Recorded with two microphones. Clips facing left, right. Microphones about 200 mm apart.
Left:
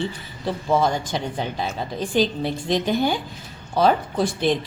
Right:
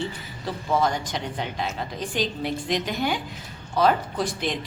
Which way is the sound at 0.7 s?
25° left (ahead or behind).